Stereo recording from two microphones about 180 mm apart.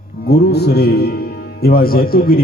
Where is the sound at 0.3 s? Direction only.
65° left (ahead or behind).